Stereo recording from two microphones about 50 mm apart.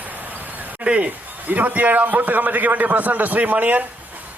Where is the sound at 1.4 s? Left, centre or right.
Right.